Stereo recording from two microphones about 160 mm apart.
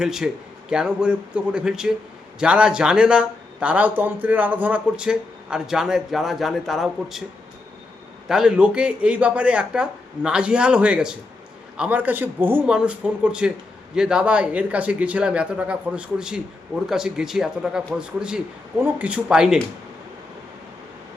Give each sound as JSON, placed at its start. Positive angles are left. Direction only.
{"t": 0.0, "sound": "speech", "side_deg": -5}
{"t": 8.3, "sound": "speech", "side_deg": -5}